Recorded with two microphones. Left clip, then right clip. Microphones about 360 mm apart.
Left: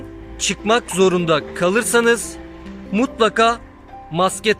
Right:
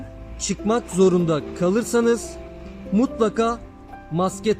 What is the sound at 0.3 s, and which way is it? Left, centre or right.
A man's voice, left.